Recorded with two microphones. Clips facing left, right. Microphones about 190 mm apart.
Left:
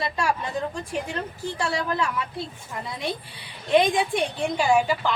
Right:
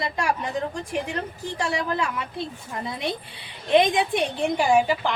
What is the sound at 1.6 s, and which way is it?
Speech, 15° right (ahead or behind).